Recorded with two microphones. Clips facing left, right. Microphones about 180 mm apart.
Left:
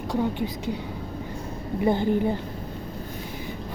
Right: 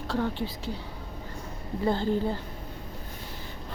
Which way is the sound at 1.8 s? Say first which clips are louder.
Left 4 dB; 15° left (ahead or behind).